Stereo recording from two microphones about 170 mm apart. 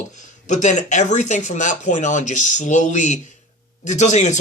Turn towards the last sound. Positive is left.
turn(degrees=45)  # may be behind; listen again after turning